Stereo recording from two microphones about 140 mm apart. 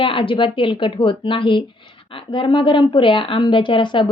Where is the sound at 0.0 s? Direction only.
40° left (ahead or behind).